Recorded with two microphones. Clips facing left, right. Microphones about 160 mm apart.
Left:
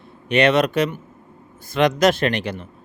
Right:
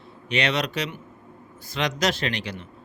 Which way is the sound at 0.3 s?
55° left (ahead or behind).